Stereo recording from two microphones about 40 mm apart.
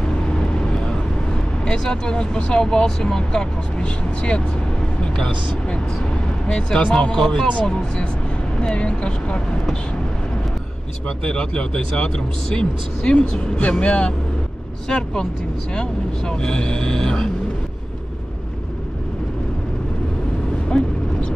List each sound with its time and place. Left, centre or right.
0.3 s vehicle: left
1.7 s speech: centre
3.8 s speech: left
11.1 s speech: left
13.2 s speech: left
14.9 s speech: left
20.6 s vehicle: left